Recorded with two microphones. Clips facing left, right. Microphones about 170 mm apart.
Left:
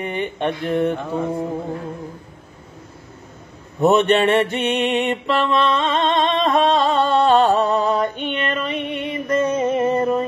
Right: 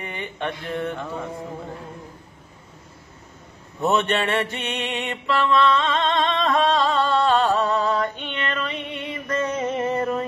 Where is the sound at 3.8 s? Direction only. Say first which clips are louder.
Left 7 dB; 20° left (ahead or behind).